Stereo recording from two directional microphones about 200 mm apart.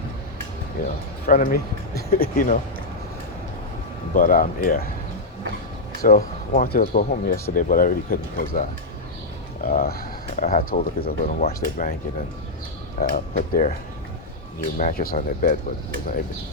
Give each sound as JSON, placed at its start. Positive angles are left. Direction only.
{"t": 0.8, "sound": "speech", "side_deg": 45}
{"t": 4.1, "sound": "speech", "side_deg": 45}
{"t": 6.0, "sound": "speech", "side_deg": 45}
{"t": 9.6, "sound": "speech", "side_deg": 50}
{"t": 13.0, "sound": "speech", "side_deg": 45}
{"t": 14.8, "sound": "speech", "side_deg": 45}